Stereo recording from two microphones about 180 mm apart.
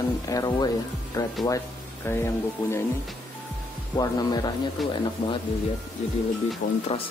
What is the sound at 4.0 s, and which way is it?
Speech, 20° left (ahead or behind).